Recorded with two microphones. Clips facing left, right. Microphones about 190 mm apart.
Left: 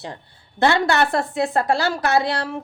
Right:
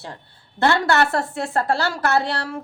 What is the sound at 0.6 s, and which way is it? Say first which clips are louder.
A woman's voice: even; 15° left (ahead or behind).